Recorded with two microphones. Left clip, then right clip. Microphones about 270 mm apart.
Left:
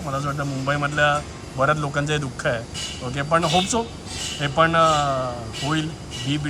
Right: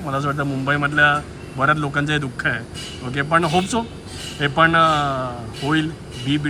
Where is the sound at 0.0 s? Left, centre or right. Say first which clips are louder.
Right 4 dB; centre.